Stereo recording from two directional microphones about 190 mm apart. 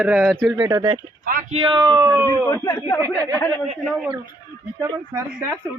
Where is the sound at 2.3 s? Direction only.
15° left (ahead or behind).